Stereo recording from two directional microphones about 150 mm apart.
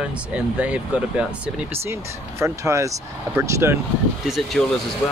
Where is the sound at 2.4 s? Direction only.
20° right (ahead or behind).